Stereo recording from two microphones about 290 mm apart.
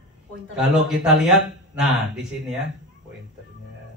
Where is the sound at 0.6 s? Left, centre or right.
Centre.